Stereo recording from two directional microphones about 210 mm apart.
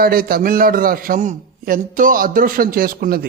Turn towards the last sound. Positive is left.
turn(degrees=-45)  # may be behind; listen again after turning